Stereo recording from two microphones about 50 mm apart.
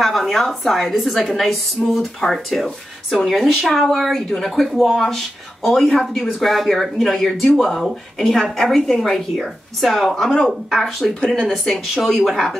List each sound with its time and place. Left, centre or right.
0.0 s a woman's voice: centre